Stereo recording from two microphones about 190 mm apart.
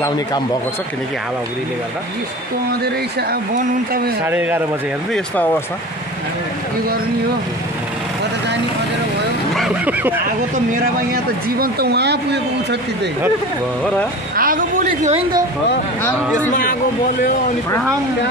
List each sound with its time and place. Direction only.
2.8 s speech: 55° right (ahead or behind)
4.3 s speech: 10° right (ahead or behind)
5.1 s speech: 10° left (ahead or behind)
9.6 s a sound: 10° right (ahead or behind)
11.5 s speech: 55° right (ahead or behind)
14.3 s a sound: 50° right (ahead or behind)
16.4 s speech: 45° left (ahead or behind)